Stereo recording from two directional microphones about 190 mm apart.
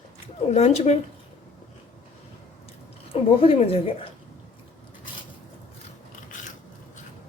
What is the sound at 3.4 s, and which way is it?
Speech, 30° left (ahead or behind).